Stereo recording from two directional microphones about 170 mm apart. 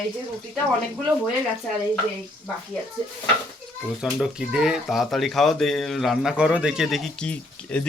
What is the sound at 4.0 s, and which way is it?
Speech, 5° right (ahead or behind).